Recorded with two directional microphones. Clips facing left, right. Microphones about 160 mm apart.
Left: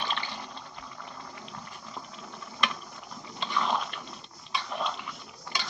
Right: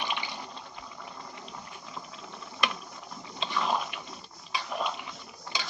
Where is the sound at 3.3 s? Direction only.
5° right (ahead or behind).